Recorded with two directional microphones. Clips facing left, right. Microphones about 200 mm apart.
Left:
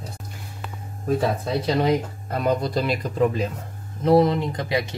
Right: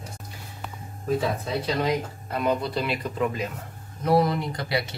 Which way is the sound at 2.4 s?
40° left (ahead or behind).